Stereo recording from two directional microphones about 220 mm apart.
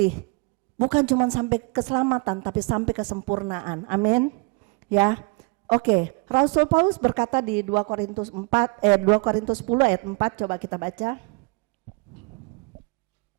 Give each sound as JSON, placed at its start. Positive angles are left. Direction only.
{"t": 1.2, "sound": "a woman's voice", "side_deg": -25}